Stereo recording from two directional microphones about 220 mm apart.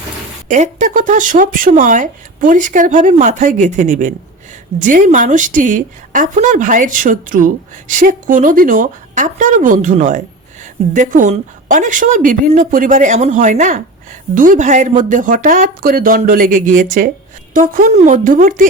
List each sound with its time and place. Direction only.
0.4 s speech: 35° right (ahead or behind)